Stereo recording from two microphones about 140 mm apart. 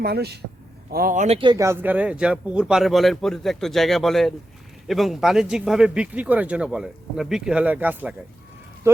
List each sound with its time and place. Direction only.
0.9 s speech: 90° right; by 1.4 s 60° right (ahead or behind)
1.5 s a man's voice: 20° right (ahead or behind)